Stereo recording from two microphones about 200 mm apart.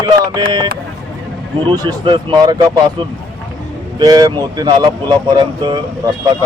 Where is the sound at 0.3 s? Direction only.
20° right (ahead or behind).